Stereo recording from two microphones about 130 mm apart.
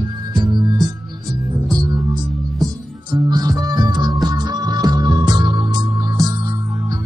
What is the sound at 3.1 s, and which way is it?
Music, 35° right (ahead or behind).